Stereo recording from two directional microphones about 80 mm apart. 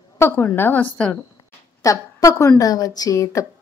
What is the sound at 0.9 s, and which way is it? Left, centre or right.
Speech, centre.